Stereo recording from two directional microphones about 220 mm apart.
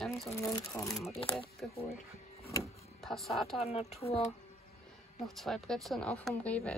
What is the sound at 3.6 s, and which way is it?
Speech, 30° left (ahead or behind).